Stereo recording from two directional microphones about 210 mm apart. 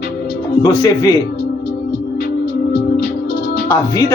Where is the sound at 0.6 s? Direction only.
20° left (ahead or behind).